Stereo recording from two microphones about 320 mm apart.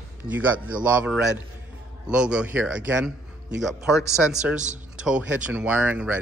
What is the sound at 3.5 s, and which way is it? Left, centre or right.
Speech, right.